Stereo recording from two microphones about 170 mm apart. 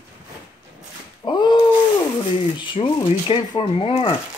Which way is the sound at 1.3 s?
25° left (ahead or behind).